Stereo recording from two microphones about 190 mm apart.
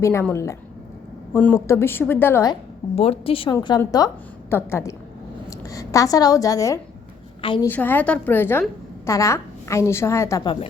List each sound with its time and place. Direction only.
0.0 s a woman's voice: 15° left (ahead or behind)
2.9 s a woman's voice: 30° left (ahead or behind)
7.7 s a woman's voice: 10° left (ahead or behind); by 10.7 s 25° left (ahead or behind)